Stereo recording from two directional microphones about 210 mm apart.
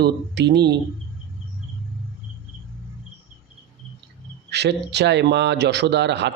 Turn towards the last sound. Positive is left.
turn(degrees=-55)  # may be behind; listen again after turning